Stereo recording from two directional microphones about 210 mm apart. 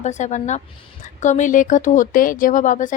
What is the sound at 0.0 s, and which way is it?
Speech, 35° left (ahead or behind).